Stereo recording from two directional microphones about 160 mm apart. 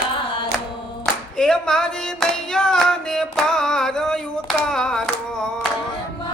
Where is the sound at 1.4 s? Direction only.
5° left (ahead or behind).